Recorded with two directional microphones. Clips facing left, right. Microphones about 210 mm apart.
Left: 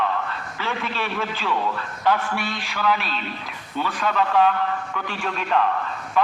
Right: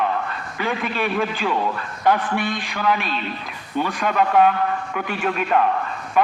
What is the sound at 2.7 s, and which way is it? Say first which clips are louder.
A man's voice: even; 45° right (ahead or behind).